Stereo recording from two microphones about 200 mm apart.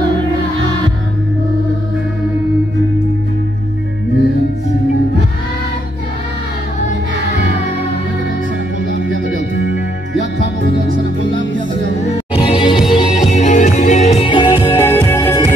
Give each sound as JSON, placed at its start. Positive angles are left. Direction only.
{"t": 10.1, "sound": "music", "side_deg": 60}
{"t": 12.4, "sound": "music", "side_deg": 25}
{"t": 14.8, "sound": "music", "side_deg": 10}